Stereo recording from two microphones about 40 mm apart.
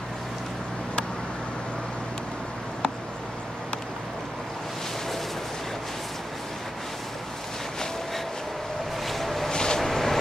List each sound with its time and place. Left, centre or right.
9.0 s a sound: centre
9.5 s vehicle: centre
9.8 s vehicle: centre